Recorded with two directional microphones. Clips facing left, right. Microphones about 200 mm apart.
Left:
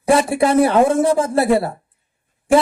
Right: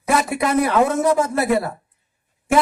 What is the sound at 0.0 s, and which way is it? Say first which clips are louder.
A woman's voice: left 5 dB; 30° left (ahead or behind).